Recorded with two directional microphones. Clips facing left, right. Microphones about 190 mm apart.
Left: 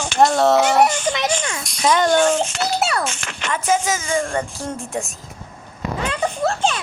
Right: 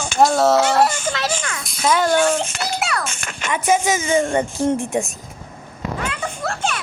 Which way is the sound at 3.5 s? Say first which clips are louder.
Right 2 dB; 15° right (ahead or behind).